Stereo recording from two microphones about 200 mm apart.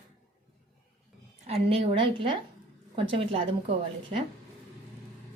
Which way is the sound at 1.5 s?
30° right (ahead or behind).